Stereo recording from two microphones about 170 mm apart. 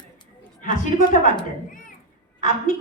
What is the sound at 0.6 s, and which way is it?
Speech, 50° left (ahead or behind).